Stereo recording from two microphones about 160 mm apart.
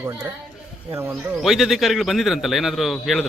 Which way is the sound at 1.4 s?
Centre (ahead or behind).